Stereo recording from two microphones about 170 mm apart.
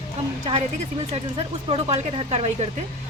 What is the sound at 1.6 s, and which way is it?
Speech, 35° right (ahead or behind).